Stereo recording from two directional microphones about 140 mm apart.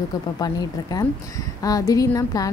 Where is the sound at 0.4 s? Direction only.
30° left (ahead or behind).